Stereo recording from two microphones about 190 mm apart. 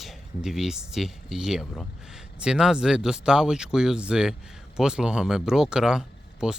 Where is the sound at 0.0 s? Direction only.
Centre (ahead or behind).